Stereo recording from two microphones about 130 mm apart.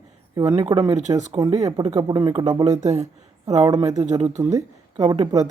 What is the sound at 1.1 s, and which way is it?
Speech, 30° right (ahead or behind).